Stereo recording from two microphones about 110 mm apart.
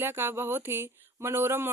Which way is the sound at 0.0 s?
20° right (ahead or behind).